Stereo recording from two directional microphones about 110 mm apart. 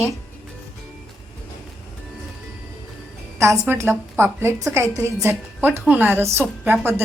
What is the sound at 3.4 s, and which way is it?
A woman's voice, 25° right (ahead or behind).